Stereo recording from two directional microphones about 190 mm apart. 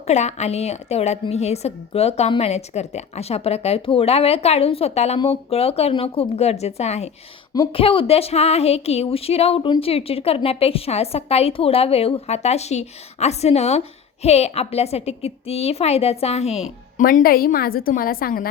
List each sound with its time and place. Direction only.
0.1 s speech: 35° left (ahead or behind)
17.0 s a woman's voice: 45° left (ahead or behind)